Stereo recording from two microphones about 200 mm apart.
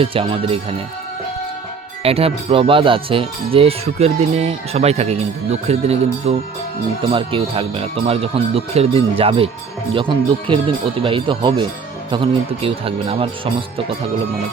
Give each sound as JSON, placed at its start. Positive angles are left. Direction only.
{"t": 0.0, "sound": "speech", "side_deg": -25}
{"t": 2.0, "sound": "speech", "side_deg": -30}